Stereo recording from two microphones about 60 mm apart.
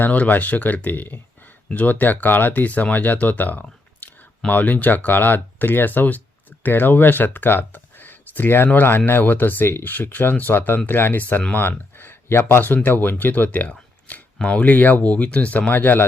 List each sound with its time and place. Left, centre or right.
0.0 s speech: left